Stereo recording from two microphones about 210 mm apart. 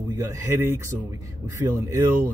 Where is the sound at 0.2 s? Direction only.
10° right (ahead or behind).